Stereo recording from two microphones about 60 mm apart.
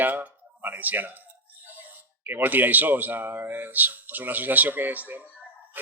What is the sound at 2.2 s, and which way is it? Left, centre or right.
Speech, right.